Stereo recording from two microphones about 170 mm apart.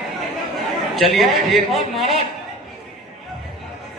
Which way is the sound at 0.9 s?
Centre (ahead or behind).